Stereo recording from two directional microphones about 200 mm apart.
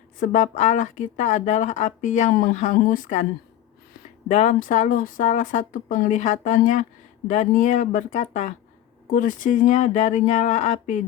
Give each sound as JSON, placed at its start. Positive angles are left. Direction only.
{"t": 0.2, "sound": "speech", "side_deg": 40}
{"t": 4.3, "sound": "speech", "side_deg": 35}